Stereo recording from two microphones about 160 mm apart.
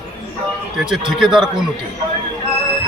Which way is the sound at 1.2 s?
5° right (ahead or behind).